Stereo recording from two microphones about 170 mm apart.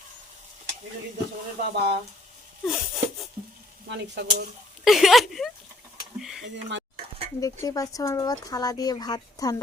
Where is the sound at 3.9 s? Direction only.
70° right (ahead or behind).